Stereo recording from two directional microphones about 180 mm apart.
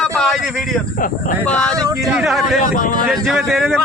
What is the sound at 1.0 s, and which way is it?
Speech, 50° left (ahead or behind).